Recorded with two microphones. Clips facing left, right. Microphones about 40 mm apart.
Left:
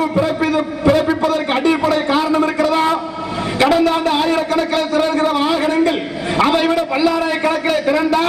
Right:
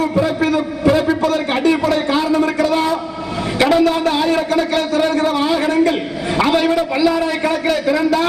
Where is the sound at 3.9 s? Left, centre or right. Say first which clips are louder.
Left 1 dB; left.